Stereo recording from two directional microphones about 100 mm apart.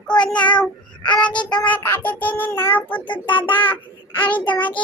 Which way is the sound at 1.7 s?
20° left (ahead or behind).